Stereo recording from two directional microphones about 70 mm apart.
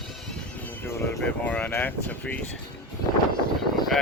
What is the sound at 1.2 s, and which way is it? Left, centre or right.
Speech, centre.